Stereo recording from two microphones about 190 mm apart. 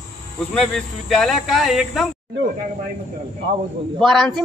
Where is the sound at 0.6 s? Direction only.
Centre (ahead or behind).